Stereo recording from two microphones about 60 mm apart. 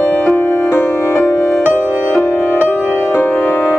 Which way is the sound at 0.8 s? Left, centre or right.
Left.